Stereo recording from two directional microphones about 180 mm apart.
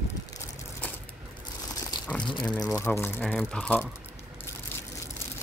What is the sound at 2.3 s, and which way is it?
Speech, 5° left (ahead or behind).